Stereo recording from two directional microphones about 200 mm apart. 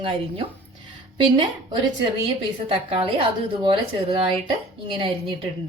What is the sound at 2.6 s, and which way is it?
Speech, 25° right (ahead or behind).